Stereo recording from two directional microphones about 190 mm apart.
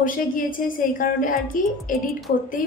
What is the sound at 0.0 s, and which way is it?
A woman's voice, 45° left (ahead or behind).